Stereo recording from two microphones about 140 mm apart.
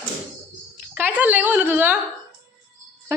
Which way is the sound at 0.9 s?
10° right (ahead or behind).